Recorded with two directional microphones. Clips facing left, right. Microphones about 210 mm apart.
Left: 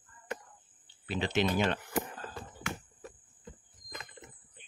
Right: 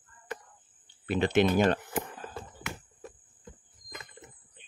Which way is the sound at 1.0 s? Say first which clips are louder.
Right 6 dB; 55° right (ahead or behind).